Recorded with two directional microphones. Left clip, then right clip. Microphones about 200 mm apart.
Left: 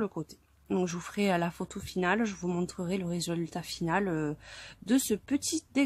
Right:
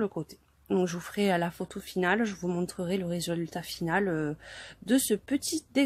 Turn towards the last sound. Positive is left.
turn(degrees=5)  # may be behind; listen again after turning